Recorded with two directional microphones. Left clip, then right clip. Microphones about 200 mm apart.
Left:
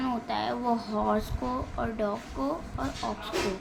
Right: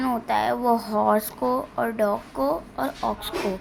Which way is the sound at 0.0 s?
35° right (ahead or behind).